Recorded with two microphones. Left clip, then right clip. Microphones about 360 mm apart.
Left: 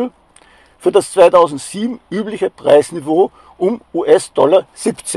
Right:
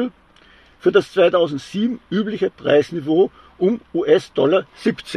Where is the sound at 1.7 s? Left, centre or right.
Centre.